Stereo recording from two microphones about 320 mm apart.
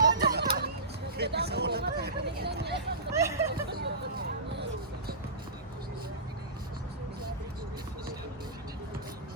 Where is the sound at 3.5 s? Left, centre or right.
Right.